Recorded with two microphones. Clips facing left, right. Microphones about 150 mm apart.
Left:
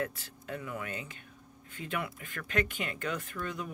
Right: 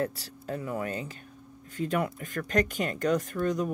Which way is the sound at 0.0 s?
35° right (ahead or behind).